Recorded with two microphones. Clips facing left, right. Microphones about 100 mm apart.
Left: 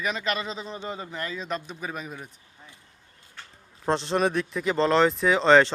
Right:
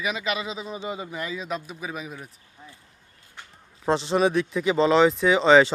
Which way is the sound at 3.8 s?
Centre (ahead or behind).